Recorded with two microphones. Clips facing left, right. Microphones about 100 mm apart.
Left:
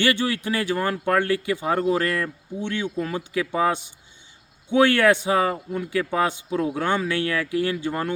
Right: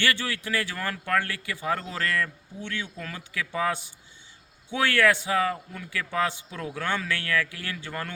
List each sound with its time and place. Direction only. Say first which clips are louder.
0.0 s speech: left 6 dB; 20° left (ahead or behind)